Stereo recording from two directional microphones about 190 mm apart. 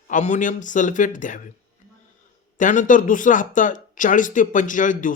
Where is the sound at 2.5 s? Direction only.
40° left (ahead or behind).